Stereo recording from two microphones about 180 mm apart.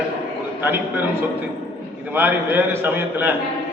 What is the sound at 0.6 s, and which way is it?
Speech, 10° right (ahead or behind).